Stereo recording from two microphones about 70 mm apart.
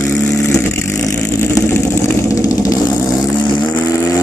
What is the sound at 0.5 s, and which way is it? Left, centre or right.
Vehicle, left.